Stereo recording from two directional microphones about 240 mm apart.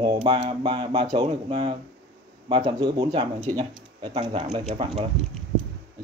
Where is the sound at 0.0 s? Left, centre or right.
Centre.